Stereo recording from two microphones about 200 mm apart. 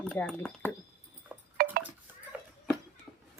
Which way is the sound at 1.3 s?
5° right (ahead or behind).